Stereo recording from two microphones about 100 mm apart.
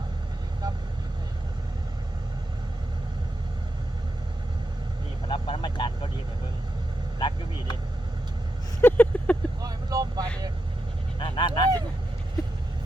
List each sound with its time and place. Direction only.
0.6 s vehicle: 40° right (ahead or behind)
5.3 s vehicle: 55° left (ahead or behind)
7.2 s vehicle: 55° left (ahead or behind)
8.8 s a sound: 15° left (ahead or behind)
9.6 s vehicle: 40° right (ahead or behind)
11.2 s honk: 50° left (ahead or behind)